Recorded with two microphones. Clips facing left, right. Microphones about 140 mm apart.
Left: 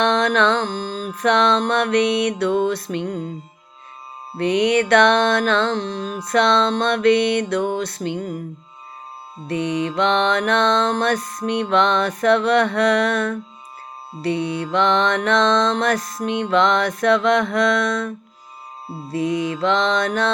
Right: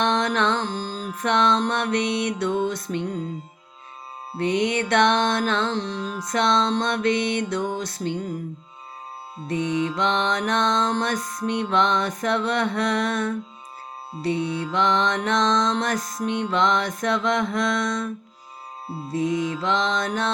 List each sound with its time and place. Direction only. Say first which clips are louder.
0.0 s music: left 4 dB; 75° left (ahead or behind)
4.4 s music: left 5 dB; 70° left (ahead or behind)
9.5 s music: left 2 dB; 70° left (ahead or behind)
19.1 s music: left 2 dB; 70° left (ahead or behind)